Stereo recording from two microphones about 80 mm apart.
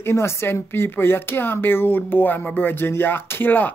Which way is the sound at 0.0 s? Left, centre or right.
Left.